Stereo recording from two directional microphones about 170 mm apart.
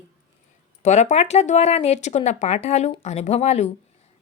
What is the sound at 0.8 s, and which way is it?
Speech, 40° left (ahead or behind).